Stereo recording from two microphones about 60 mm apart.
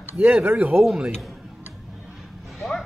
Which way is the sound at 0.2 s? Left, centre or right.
Right.